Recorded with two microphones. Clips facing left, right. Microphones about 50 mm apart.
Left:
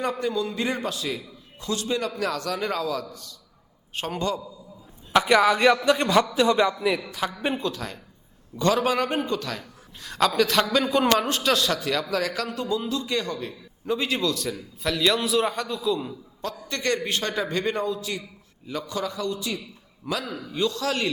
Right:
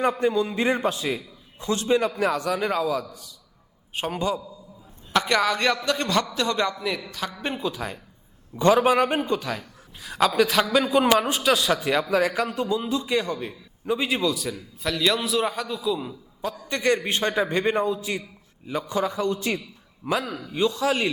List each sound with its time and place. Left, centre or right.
0.0 s a man's voice: right
5.1 s a man's voice: centre
7.6 s a man's voice: centre; by 19.5 s right
20.1 s a man's voice: right